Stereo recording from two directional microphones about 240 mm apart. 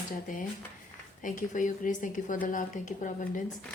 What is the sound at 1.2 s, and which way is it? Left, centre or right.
A woman's voice, left.